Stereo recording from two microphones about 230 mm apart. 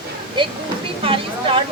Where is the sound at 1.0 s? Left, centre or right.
Right.